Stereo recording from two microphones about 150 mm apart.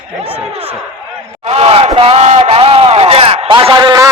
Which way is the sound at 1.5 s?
45° right (ahead or behind).